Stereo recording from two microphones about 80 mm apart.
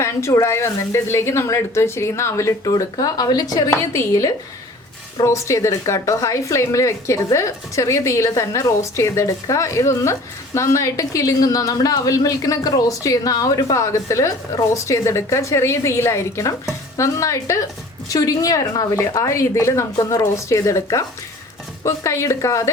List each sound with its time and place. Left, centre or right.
0.0 s a woman's voice: left
3.7 s a woman's voice: left